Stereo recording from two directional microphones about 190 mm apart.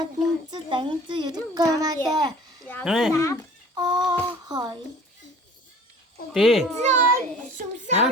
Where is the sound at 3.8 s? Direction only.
20° right (ahead or behind).